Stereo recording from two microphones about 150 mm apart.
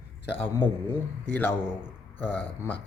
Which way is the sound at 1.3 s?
15° left (ahead or behind).